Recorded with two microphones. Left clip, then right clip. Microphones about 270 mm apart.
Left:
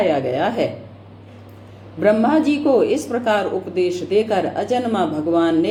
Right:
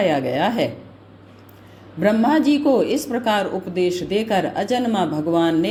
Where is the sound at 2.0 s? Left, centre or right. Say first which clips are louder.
Left 2 dB; right.